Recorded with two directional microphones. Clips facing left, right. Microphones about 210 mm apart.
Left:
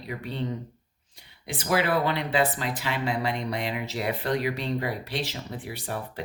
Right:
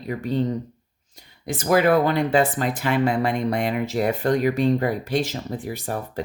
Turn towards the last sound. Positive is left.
turn(degrees=-45)  # may be behind; listen again after turning